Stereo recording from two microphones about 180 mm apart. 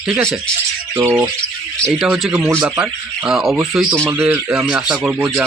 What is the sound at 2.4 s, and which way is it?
Speech, 15° right (ahead or behind).